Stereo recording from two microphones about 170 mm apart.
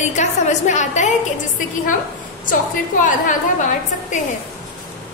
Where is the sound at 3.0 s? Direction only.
50° left (ahead or behind).